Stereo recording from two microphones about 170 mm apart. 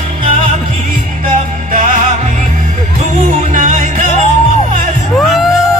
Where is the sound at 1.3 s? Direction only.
50° right (ahead or behind).